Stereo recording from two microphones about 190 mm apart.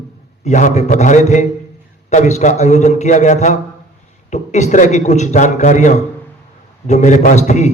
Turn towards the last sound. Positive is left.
turn(degrees=40)  # may be behind; listen again after turning